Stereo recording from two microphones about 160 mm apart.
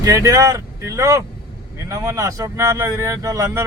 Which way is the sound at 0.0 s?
20° right (ahead or behind).